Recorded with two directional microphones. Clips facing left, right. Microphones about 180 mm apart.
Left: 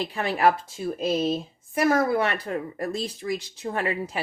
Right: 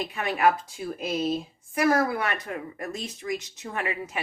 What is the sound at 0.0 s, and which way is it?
Speech, 30° left (ahead or behind).